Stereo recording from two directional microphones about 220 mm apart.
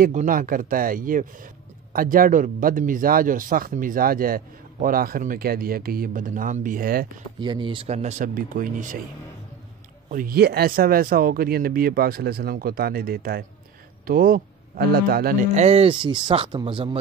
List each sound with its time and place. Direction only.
0.0 s speech: 35° right (ahead or behind)
7.3 s a man's voice: 20° right (ahead or behind); by 8.9 s 35° right (ahead or behind)
10.0 s a man's voice: 40° right (ahead or behind); by 16.9 s 20° right (ahead or behind)